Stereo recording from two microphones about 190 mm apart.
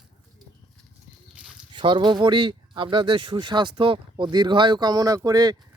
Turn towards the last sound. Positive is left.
turn(degrees=-20)  # may be behind; listen again after turning